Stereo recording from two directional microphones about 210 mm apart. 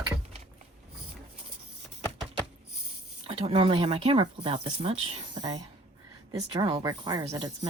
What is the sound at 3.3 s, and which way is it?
Speech, 30° right (ahead or behind).